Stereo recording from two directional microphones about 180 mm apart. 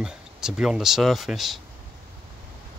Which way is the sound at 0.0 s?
5° right (ahead or behind).